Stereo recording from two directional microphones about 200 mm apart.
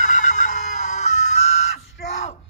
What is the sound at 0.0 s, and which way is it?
Fowl, 35° left (ahead or behind).